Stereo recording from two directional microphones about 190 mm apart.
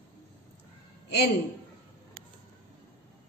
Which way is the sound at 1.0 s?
60° left (ahead or behind).